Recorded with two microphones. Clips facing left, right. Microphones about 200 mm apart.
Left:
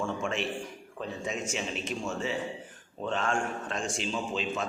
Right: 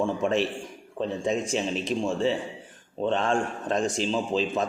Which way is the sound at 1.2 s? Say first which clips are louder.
Right 7 dB; 35° right (ahead or behind).